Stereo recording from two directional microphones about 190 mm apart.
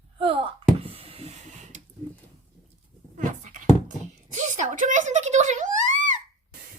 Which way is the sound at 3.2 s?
40° right (ahead or behind).